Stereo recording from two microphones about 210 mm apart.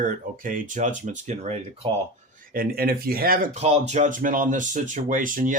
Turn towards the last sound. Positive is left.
turn(degrees=-40)  # may be behind; listen again after turning